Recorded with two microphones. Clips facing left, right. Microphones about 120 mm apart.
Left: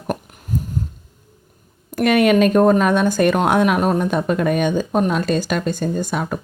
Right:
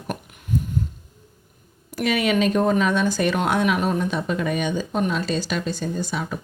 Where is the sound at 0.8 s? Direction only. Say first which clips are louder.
Left 1 dB; 40° left (ahead or behind).